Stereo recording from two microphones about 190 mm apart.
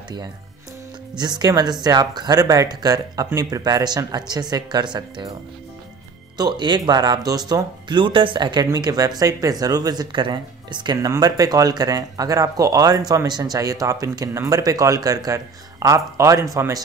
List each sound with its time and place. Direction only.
1.1 s speech: 20° right (ahead or behind)
6.3 s speech: 20° right (ahead or behind)